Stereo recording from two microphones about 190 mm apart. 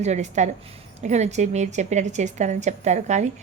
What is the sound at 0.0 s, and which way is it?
A woman's voice, 35° right (ahead or behind).